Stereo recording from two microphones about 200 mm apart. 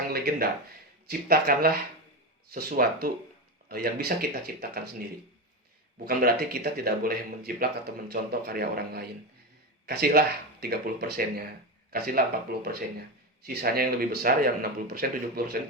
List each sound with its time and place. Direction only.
0.1 s a sound: 50° right (ahead or behind)
1.0 s speech: 50° right (ahead or behind)
6.1 s speech: 50° right (ahead or behind)
13.4 s speech: 50° right (ahead or behind)